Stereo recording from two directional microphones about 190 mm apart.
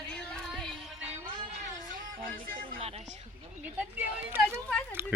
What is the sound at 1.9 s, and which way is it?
Music, 45° right (ahead or behind).